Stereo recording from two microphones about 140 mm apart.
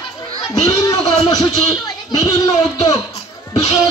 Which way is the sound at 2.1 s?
25° left (ahead or behind).